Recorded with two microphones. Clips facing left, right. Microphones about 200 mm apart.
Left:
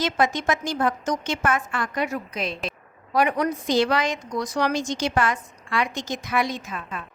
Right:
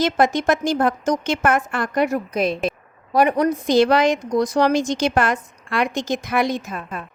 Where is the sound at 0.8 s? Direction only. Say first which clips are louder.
Right 4 dB; 40° right (ahead or behind).